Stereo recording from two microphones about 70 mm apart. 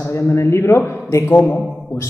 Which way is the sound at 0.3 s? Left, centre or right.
Left.